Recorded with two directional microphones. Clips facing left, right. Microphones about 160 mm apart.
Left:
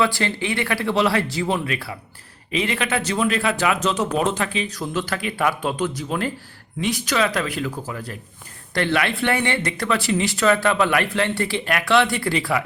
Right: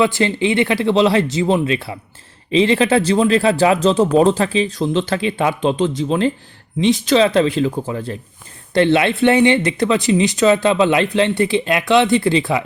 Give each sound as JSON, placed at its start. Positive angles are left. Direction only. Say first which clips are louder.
{"t": 0.0, "sound": "speech", "louder": "right 6 dB", "side_deg": -20}